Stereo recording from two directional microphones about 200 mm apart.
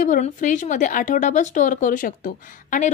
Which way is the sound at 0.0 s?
40° left (ahead or behind).